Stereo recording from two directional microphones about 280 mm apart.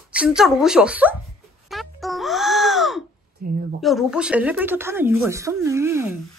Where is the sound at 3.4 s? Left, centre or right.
Right.